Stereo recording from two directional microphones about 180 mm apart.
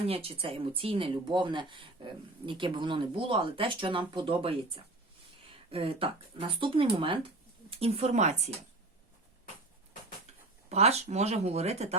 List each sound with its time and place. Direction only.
0.1 s speech: 30° right (ahead or behind)
10.7 s speech: 35° right (ahead or behind)